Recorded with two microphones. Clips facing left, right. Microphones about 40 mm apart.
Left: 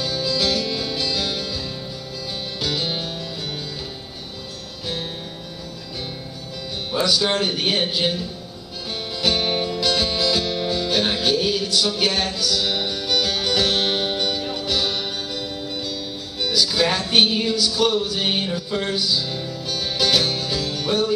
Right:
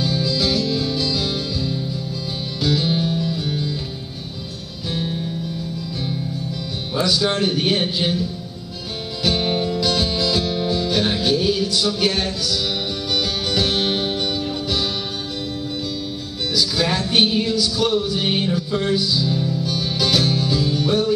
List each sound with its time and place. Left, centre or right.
0.0 s music: centre
2.6 s music: centre
6.9 s a man's voice: centre
9.2 s music: centre
9.9 s music: centre
16.5 s music: centre
17.1 s a man's voice: centre
17.6 s music: centre
19.0 s music: centre